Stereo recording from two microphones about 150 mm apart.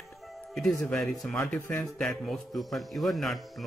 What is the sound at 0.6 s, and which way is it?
Speech, 5° left (ahead or behind).